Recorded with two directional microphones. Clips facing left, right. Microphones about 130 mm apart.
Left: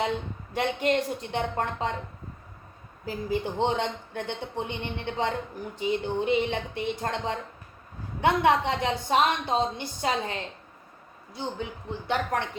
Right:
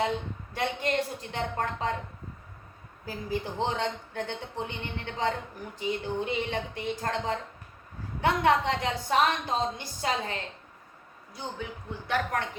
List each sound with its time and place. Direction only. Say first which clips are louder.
0.5 s a woman's voice: left 4 dB; 20° left (ahead or behind)
3.1 s a woman's voice: left 4 dB; 25° left (ahead or behind)
11.3 s a woman's voice: left 4 dB; 25° left (ahead or behind)